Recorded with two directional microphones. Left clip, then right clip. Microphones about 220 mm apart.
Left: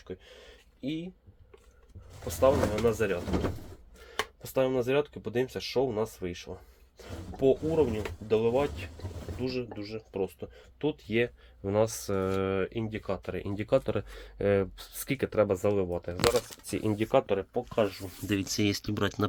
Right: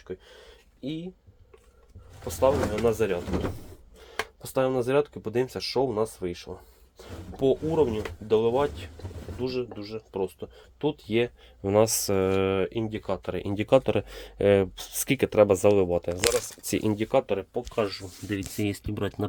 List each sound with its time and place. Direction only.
0.8 s speech: 15° right (ahead or behind)
2.8 s speech: 25° right (ahead or behind)
4.4 s speech: 25° right (ahead or behind)
16.9 s speech: 15° right (ahead or behind)
17.7 s speech: 5° right (ahead or behind)